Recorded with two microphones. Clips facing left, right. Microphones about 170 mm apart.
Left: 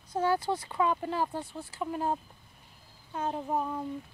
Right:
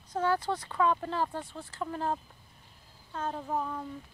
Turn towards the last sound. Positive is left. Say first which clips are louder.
# left 2 dB
turn(degrees=15)  # may be behind; listen again after turning